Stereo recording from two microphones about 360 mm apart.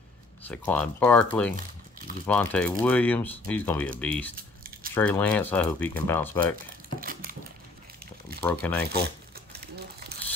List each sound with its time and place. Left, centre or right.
0.4 s speech: centre
4.4 s a sound: right
4.9 s speech: centre
8.4 s speech: centre
8.9 s crumpling: right